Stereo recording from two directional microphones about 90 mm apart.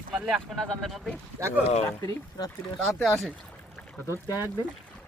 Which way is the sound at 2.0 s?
40° left (ahead or behind).